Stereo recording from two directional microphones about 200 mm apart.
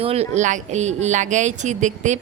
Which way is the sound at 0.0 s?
30° right (ahead or behind).